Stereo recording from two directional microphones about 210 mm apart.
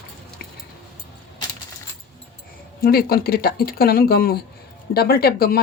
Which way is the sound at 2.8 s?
45° left (ahead or behind).